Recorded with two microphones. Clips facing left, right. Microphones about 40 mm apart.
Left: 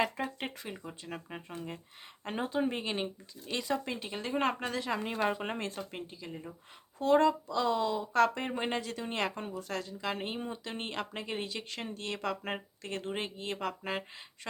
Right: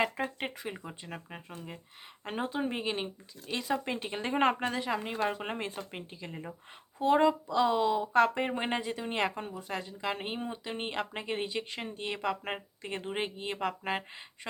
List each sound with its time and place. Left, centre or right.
0.3 s speech: centre
1.3 s speech: centre
3.8 s speech: centre
4.4 s speech: centre
4.9 s speech: centre